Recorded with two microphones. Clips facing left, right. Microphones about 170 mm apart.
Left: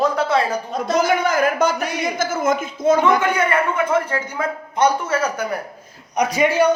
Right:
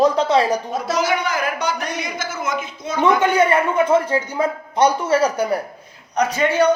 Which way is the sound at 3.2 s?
30° right (ahead or behind).